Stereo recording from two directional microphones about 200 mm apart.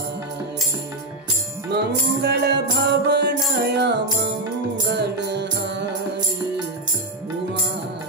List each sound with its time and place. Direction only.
1.7 s music: 55° right (ahead or behind)